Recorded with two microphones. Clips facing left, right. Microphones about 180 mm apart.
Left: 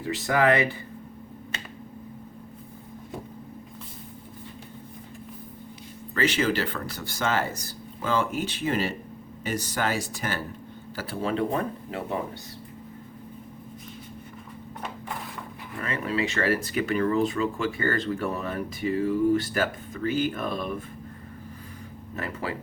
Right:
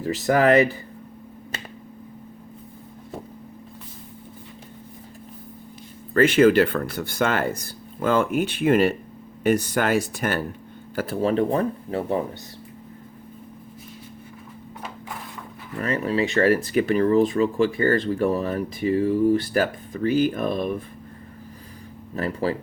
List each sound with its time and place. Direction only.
0.0 s speech: 40° right (ahead or behind)
6.1 s speech: 55° right (ahead or behind)
10.9 s speech: 40° right (ahead or behind)
15.8 s speech: 40° right (ahead or behind)
22.1 s speech: 35° right (ahead or behind)